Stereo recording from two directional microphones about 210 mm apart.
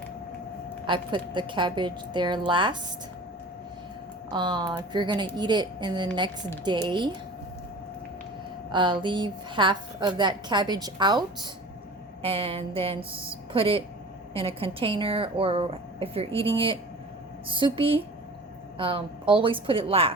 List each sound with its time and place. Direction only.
0.9 s a woman's voice: 20° right (ahead or behind)
4.3 s a woman's voice: 20° right (ahead or behind)
8.7 s a woman's voice: 20° right (ahead or behind)